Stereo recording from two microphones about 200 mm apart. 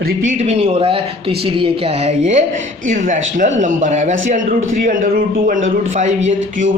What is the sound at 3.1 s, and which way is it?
A man's voice, 40° right (ahead or behind).